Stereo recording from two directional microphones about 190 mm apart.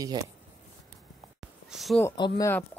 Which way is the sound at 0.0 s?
20° right (ahead or behind).